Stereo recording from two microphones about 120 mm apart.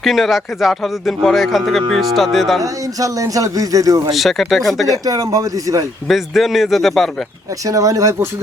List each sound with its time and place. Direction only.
0.0 s speech: centre (ahead or behind)
2.6 s a man's voice: 30° right (ahead or behind)
4.1 s speech: centre (ahead or behind)
5.0 s a man's voice: 30° right (ahead or behind)
6.1 s speech: centre (ahead or behind)
7.6 s a man's voice: 30° right (ahead or behind)